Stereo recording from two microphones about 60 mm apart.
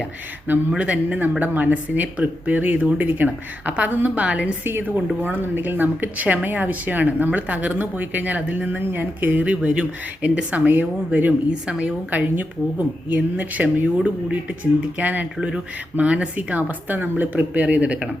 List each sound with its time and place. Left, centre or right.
0.8 s a woman's voice: right
4.6 s a woman's voice: right
11.6 s a woman's voice: centre
12.1 s a woman's voice: right